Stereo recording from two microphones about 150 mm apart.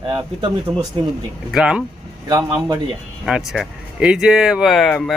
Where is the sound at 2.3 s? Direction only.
25° right (ahead or behind).